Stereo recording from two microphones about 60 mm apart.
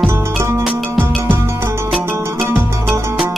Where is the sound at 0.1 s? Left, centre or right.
Right.